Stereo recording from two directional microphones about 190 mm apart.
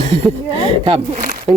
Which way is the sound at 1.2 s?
50° right (ahead or behind).